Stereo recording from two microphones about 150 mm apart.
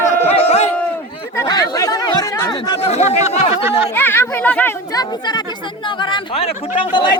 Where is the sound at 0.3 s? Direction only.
40° left (ahead or behind).